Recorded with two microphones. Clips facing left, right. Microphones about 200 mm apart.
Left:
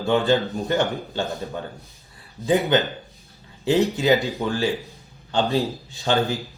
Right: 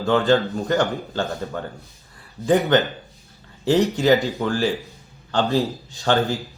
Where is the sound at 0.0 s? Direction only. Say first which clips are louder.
Right 2 dB; 15° left (ahead or behind).